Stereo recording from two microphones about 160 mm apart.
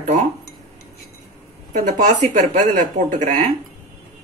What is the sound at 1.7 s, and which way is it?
Speech, 50° right (ahead or behind).